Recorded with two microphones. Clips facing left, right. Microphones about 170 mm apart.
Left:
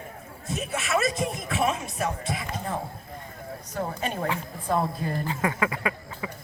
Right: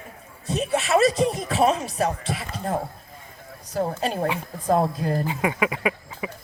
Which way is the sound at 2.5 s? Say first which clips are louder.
Right 7 dB; 40° right (ahead or behind).